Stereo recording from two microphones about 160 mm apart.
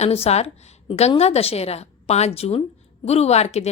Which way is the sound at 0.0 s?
40° left (ahead or behind).